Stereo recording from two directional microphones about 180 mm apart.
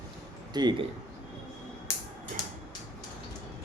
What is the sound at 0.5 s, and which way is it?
Speech, 25° right (ahead or behind).